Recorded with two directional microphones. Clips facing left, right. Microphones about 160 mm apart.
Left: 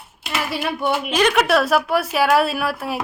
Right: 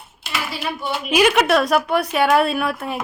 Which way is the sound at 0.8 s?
55° left (ahead or behind).